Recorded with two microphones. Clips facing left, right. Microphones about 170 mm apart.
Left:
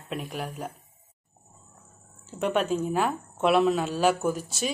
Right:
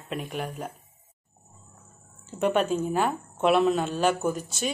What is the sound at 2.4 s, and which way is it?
Speech, centre (ahead or behind).